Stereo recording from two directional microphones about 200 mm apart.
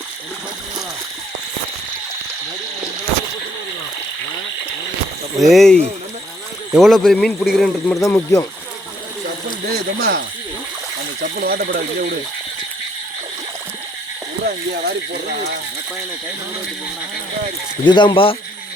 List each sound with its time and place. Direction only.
5.4 s speech: centre (ahead or behind)
7.9 s speech: 15° left (ahead or behind)
9.6 s speech: 50° right (ahead or behind)
17.8 s speech: 25° left (ahead or behind)